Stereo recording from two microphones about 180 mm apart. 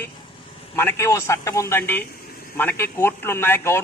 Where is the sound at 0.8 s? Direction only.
15° left (ahead or behind).